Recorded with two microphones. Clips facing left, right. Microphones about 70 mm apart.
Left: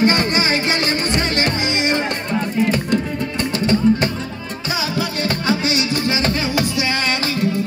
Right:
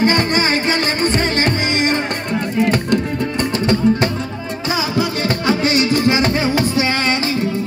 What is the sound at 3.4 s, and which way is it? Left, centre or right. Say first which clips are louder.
Music: even; right.